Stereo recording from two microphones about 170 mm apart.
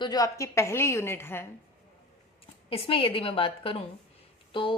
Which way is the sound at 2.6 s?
35° left (ahead or behind).